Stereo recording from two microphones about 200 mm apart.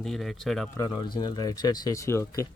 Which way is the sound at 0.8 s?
20° left (ahead or behind).